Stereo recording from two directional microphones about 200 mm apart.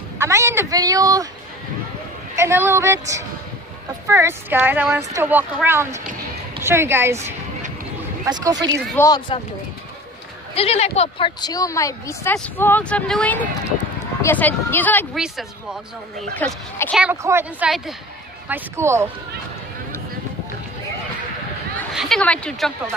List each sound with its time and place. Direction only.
0.2 s speech: 15° right (ahead or behind)
2.3 s speech: 15° right (ahead or behind)
8.3 s speech: 20° right (ahead or behind)
8.9 s a woman's voice: 15° left (ahead or behind)
10.5 s a woman's voice: 30° left (ahead or behind); by 15.0 s 10° left (ahead or behind)
15.1 s a woman's voice: 5° right (ahead or behind)
16.3 s a woman's voice: 10° left (ahead or behind)
17.0 s speech: 10° right (ahead or behind)
18.5 s speech: 15° right (ahead or behind)
21.9 s a woman's voice: 5° left (ahead or behind)